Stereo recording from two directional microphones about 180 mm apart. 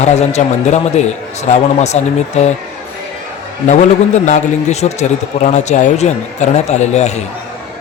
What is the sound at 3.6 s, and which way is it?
Speech, 40° left (ahead or behind).